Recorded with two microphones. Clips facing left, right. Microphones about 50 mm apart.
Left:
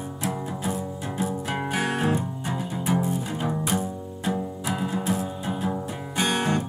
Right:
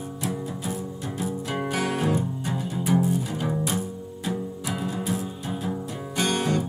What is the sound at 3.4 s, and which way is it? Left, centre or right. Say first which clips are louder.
Music: even; centre.